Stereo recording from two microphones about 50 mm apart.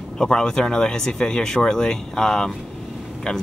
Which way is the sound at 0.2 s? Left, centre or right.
Centre.